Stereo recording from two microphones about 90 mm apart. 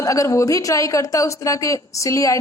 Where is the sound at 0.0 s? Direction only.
40° left (ahead or behind).